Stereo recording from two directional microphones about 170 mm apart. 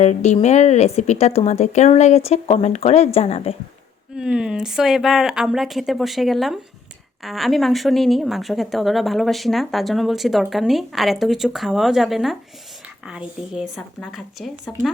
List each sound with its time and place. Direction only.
0.0 s speech: 40° left (ahead or behind)
4.2 s a woman's voice: 5° right (ahead or behind)